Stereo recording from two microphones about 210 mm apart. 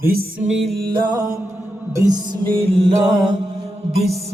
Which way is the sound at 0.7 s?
50° right (ahead or behind).